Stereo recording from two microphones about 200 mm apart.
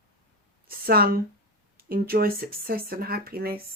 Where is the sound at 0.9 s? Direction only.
50° right (ahead or behind).